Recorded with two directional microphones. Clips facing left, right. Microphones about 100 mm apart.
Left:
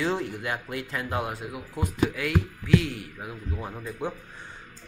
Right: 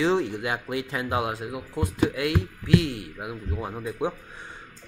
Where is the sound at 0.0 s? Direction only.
20° right (ahead or behind).